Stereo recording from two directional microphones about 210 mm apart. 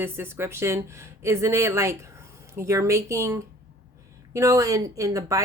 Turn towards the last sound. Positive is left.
turn(degrees=-15)  # may be behind; listen again after turning